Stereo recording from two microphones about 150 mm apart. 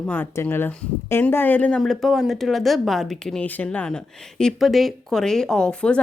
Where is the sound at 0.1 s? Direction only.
10° left (ahead or behind).